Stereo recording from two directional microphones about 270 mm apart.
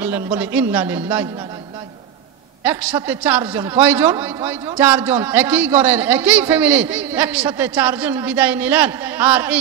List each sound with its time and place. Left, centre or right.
0.0 s a man's voice: centre
2.6 s a man's voice: centre